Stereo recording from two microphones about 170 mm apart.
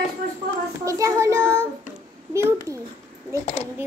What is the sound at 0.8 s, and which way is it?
Child singing, 20° right (ahead or behind).